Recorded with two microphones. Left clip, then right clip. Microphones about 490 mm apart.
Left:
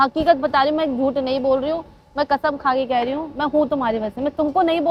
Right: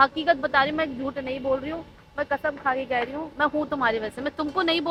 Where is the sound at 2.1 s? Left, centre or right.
Left.